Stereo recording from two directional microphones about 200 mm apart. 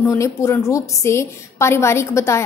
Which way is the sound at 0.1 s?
15° left (ahead or behind).